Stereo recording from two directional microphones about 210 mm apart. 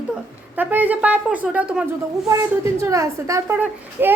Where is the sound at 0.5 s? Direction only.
10° right (ahead or behind).